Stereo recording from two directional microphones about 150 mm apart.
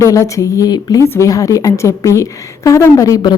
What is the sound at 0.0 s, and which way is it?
A woman's voice, 20° left (ahead or behind).